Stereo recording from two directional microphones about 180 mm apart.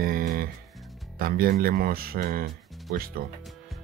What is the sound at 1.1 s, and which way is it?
Speech, 55° right (ahead or behind).